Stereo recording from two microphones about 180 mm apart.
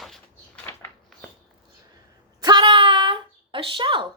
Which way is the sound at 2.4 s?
25° right (ahead or behind).